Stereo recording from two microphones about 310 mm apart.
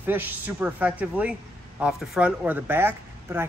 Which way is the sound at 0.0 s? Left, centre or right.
Centre.